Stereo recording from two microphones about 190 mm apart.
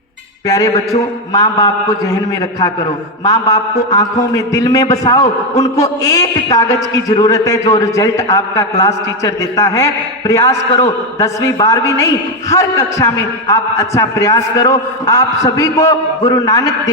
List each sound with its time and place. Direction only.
0.4 s a man's voice: 20° left (ahead or behind)